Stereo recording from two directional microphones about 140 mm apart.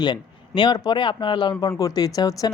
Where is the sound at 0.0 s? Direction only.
30° left (ahead or behind).